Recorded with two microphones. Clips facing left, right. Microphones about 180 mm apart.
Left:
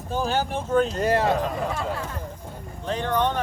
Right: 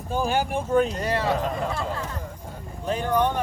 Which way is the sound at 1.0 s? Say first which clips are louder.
Left 4 dB; 45° left (ahead or behind).